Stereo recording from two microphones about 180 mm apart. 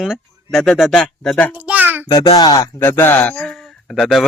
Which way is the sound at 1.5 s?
10° right (ahead or behind).